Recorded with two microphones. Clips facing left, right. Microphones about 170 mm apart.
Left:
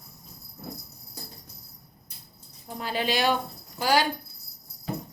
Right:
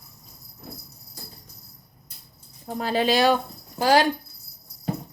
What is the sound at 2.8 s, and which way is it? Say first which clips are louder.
Speech: right 6 dB; 40° right (ahead or behind).